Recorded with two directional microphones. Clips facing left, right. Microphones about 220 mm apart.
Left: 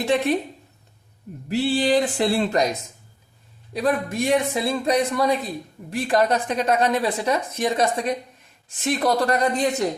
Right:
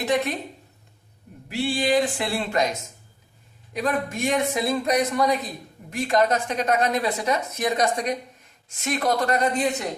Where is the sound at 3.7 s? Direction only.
35° left (ahead or behind).